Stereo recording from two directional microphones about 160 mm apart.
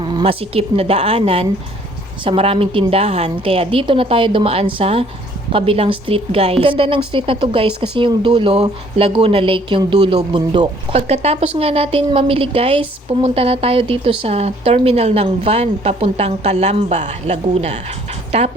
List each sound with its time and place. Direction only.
0.1 s speech: 35° right (ahead or behind)
10.9 s speech: 40° right (ahead or behind)